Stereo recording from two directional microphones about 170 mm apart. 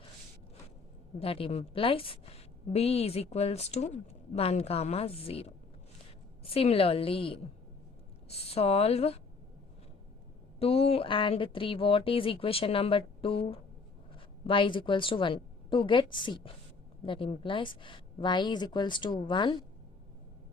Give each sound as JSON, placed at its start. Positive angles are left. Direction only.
{"t": 1.2, "sound": "a woman's voice", "side_deg": 35}
{"t": 10.6, "sound": "a woman's voice", "side_deg": 35}